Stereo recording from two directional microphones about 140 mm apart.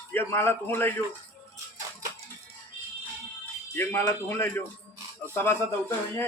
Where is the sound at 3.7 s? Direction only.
15° left (ahead or behind).